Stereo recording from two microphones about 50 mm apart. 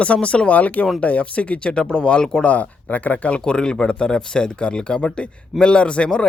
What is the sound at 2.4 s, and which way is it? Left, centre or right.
Speech, left.